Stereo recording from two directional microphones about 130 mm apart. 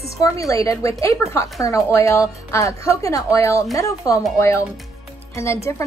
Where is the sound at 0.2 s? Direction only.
25° left (ahead or behind).